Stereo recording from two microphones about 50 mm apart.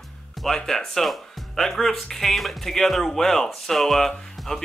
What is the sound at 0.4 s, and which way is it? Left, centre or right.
Speech, centre.